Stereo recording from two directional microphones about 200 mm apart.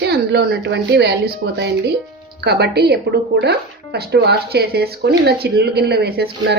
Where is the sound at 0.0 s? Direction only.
55° right (ahead or behind).